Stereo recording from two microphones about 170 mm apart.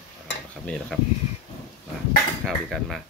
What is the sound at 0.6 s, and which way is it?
Speech, 5° left (ahead or behind).